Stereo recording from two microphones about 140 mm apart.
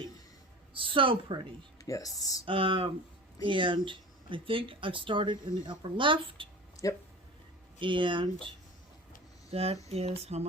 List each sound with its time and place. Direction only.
0.7 s speech: 40° right (ahead or behind)
1.8 s speech: 25° left (ahead or behind)
2.4 s speech: 40° right (ahead or behind)
6.8 s speech: 25° left (ahead or behind)
7.8 s speech: 35° right (ahead or behind)
9.9 s a sound: 45° right (ahead or behind)